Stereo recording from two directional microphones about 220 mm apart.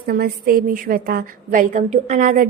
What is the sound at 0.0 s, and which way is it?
A woman's voice, 45° right (ahead or behind).